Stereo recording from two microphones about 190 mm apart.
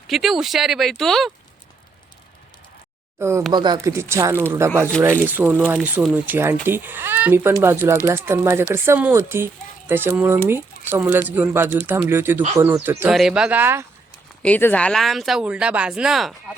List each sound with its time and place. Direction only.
0.1 s speech: centre (ahead or behind)
3.2 s speech: 15° right (ahead or behind)
14.4 s speech: 10° left (ahead or behind)